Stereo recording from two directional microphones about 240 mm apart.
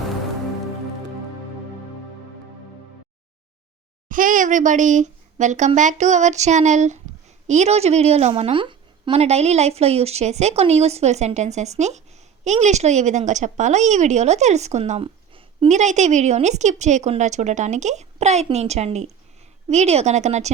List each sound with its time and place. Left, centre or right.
4.1 s a woman's voice: right